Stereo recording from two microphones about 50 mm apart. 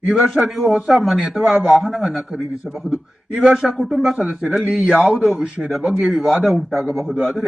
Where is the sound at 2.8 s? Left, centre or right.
Right.